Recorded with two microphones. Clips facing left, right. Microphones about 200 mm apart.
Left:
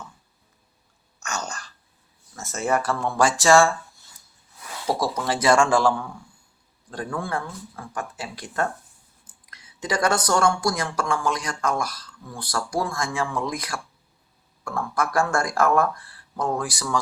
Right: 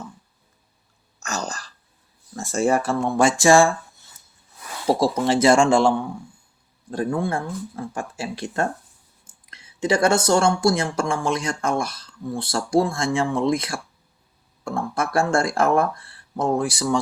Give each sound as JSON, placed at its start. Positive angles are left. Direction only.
{"t": 1.2, "sound": "a sound", "side_deg": -35}
{"t": 2.3, "sound": "speech", "side_deg": -30}
{"t": 4.9, "sound": "speech", "side_deg": -25}